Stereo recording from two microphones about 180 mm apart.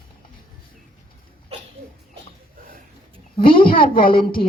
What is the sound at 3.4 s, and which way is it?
Speech, 50° left (ahead or behind).